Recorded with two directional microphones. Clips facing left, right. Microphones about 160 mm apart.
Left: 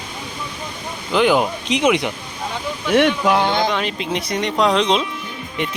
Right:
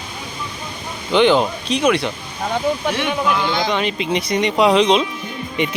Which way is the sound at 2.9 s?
60° left (ahead or behind).